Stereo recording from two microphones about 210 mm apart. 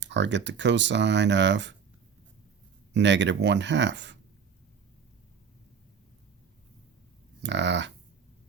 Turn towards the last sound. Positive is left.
turn(degrees=-55)  # may be behind; listen again after turning